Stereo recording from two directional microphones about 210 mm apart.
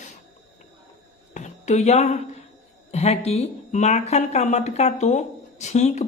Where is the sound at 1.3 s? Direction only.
35° left (ahead or behind).